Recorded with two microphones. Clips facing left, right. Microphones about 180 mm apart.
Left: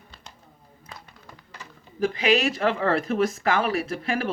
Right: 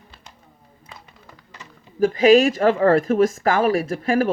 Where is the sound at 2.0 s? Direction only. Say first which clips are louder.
Right 8 dB; 45° right (ahead or behind).